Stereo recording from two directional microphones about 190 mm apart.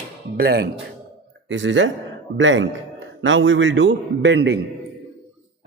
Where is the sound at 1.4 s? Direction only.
75° right (ahead or behind).